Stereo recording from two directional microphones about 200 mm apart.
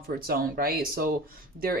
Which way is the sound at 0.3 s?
50° right (ahead or behind).